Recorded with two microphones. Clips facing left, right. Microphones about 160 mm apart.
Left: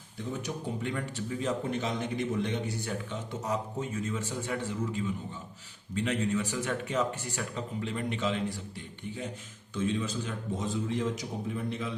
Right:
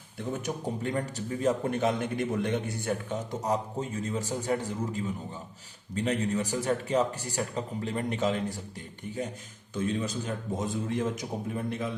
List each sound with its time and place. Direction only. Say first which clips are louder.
0.8 s a man's voice: right 3 dB; 40° right (ahead or behind)
3.4 s a man's voice: right 2 dB; 35° right (ahead or behind)